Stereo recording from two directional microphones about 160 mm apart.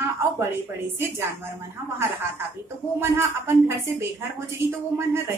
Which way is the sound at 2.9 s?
15° right (ahead or behind).